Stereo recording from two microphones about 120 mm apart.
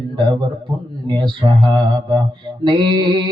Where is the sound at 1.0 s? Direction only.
40° right (ahead or behind).